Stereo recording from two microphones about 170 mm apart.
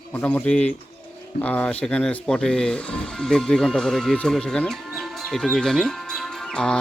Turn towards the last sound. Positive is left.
turn(degrees=5)  # may be behind; listen again after turning